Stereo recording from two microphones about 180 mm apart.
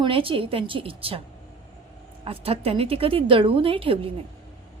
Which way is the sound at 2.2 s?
35° right (ahead or behind).